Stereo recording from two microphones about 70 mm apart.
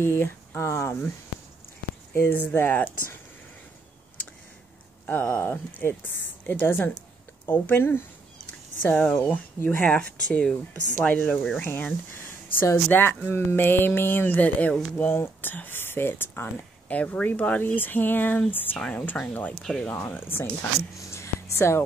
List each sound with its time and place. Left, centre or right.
0.0 s speech: left
2.1 s speech: left
5.4 s speech: left
9.2 s speech: left
10.7 s speech: left
11.2 s speech: centre
11.6 s speech: left
16.9 s speech: centre
19.6 s speech: centre
19.9 s speech: left
21.1 s a sound: left